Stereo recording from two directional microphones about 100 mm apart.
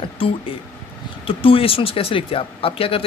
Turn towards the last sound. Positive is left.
turn(degrees=70)  # may be behind; listen again after turning